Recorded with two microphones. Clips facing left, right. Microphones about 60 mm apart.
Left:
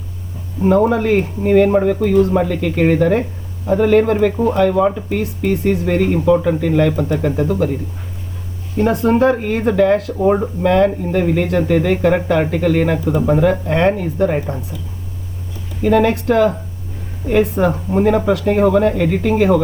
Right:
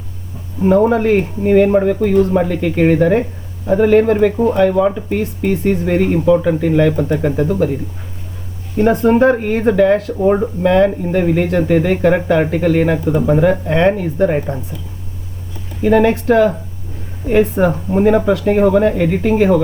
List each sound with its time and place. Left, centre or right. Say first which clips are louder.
0.6 s speech: right 2 dB; centre
8.8 s speech: right 2 dB; right
10.2 s speech: right 1 dB; centre
15.8 s speech: right 2 dB; centre
17.9 s speech: right 2 dB; centre
18.8 s speech: right 1 dB; right